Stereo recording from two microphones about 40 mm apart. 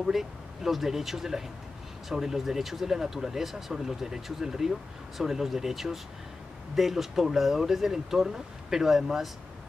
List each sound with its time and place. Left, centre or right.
0.0 s speech: centre